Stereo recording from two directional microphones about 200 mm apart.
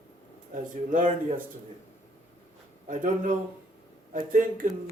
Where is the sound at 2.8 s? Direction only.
40° right (ahead or behind).